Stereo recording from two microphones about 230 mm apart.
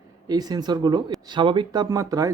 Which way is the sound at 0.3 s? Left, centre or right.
Centre.